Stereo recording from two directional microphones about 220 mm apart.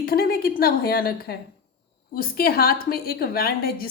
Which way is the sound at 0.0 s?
45° left (ahead or behind).